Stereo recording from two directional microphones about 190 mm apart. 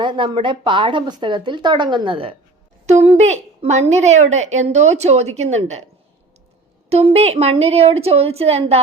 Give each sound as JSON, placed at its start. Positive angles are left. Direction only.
{"t": 0.0, "sound": "a woman's voice", "side_deg": -25}
{"t": 6.9, "sound": "a woman's voice", "side_deg": -30}